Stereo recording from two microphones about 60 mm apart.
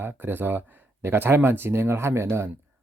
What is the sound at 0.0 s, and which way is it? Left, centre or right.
Speech, right.